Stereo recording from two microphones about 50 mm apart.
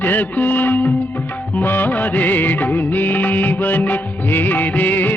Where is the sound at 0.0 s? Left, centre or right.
Left.